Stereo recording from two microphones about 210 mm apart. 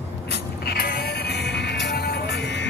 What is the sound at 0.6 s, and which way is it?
Music, 45° left (ahead or behind).